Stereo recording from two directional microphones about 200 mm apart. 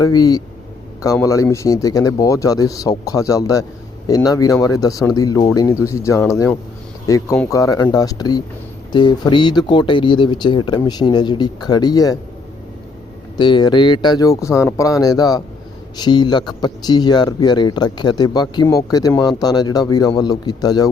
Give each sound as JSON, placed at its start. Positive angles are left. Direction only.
{"t": 0.0, "sound": "speech", "side_deg": 20}
{"t": 13.3, "sound": "speech", "side_deg": 20}